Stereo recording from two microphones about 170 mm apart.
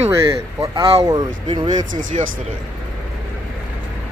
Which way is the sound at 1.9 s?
50° right (ahead or behind).